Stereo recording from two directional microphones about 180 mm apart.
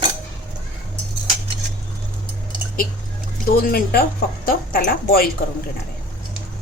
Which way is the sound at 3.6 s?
55° left (ahead or behind).